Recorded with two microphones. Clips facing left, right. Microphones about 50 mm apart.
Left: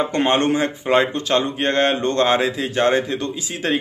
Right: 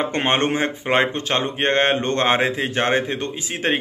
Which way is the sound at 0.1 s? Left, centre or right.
Right.